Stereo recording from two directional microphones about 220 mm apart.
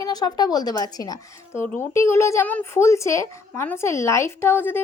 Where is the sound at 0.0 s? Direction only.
15° left (ahead or behind).